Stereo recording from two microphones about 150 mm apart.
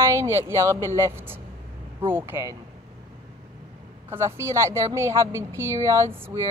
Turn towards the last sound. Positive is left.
turn(degrees=-15)  # may be behind; listen again after turning